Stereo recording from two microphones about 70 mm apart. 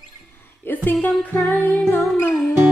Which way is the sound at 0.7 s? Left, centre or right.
Left.